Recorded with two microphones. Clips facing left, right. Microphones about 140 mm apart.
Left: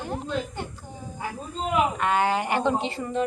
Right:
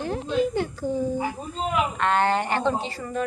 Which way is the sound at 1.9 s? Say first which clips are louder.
Right 1 dB; 10° left (ahead or behind).